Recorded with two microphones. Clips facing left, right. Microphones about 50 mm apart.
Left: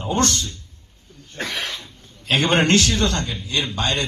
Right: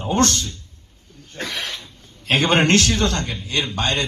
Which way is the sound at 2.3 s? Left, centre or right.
Right.